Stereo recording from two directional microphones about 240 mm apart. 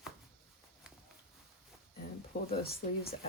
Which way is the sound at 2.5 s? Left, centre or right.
Left.